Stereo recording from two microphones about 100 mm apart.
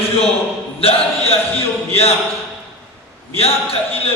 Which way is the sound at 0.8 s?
75° left (ahead or behind).